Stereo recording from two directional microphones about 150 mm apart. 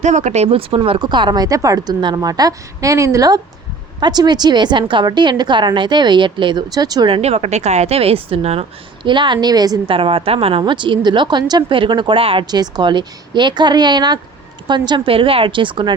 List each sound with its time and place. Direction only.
0.0 s speech: 50° right (ahead or behind); by 7.1 s 25° right (ahead or behind)
7.1 s a woman's voice: 45° right (ahead or behind)
9.0 s a woman's voice: 30° right (ahead or behind)